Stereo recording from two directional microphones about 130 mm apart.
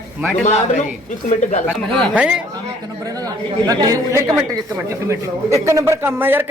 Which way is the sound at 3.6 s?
25° right (ahead or behind).